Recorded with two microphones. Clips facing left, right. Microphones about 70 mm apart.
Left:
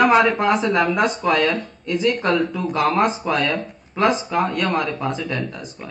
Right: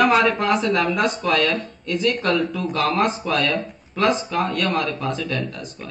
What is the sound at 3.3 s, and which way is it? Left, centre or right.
Speech, centre.